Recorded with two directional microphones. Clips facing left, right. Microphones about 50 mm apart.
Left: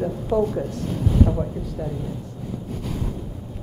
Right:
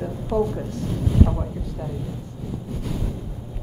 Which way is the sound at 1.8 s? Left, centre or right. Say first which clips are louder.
Left 3 dB; centre.